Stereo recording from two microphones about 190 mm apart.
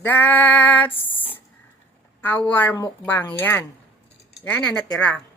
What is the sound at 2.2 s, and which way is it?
A woman's voice, 10° left (ahead or behind).